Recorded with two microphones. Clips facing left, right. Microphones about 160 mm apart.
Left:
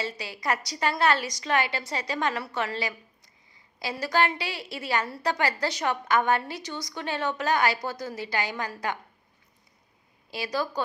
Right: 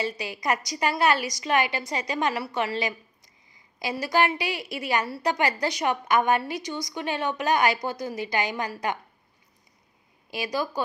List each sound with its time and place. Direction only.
0.0 s a woman's voice: 15° right (ahead or behind)
10.3 s a woman's voice: 15° right (ahead or behind)